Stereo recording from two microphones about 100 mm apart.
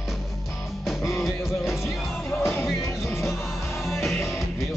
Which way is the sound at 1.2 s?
Centre (ahead or behind).